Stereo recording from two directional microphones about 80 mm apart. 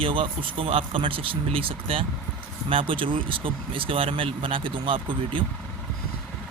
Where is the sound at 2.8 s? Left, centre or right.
Right.